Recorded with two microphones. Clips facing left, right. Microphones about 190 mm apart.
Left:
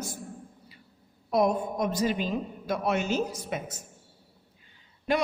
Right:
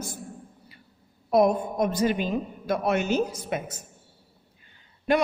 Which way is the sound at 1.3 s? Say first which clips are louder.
Right 4 dB; 55° right (ahead or behind).